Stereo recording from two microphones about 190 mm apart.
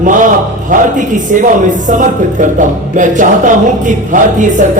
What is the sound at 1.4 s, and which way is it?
Speech, 45° right (ahead or behind).